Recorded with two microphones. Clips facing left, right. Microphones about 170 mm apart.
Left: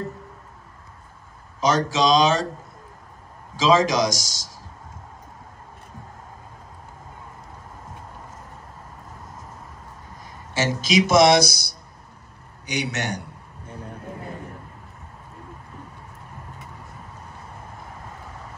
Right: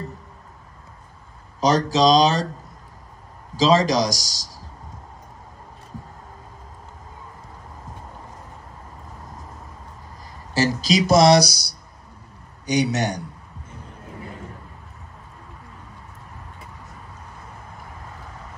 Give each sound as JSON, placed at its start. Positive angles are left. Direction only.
{"t": 1.6, "sound": "speech", "side_deg": -35}
{"t": 3.5, "sound": "speech", "side_deg": -35}
{"t": 10.5, "sound": "speech", "side_deg": -35}